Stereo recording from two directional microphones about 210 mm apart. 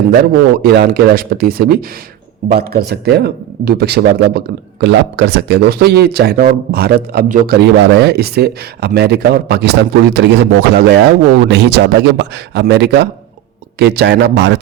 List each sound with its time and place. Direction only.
0.6 s speech: 50° right (ahead or behind)